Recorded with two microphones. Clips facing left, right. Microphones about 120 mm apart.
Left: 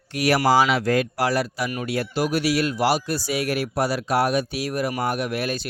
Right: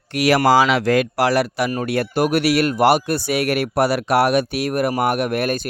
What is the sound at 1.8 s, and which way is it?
Speech, 60° right (ahead or behind).